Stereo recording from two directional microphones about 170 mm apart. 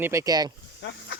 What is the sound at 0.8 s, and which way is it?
Speech, 90° left.